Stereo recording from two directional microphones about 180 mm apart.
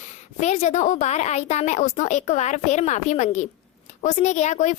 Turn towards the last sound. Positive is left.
turn(degrees=40)  # may be behind; listen again after turning